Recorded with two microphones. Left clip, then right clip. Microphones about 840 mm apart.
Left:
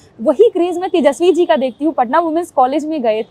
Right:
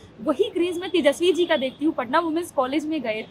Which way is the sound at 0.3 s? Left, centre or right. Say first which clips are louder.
Left 11 dB; left.